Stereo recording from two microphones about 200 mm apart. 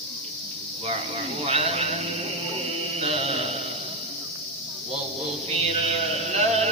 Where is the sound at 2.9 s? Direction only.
30° right (ahead or behind).